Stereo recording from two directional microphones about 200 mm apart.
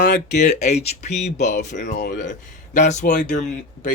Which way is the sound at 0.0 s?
50° left (ahead or behind).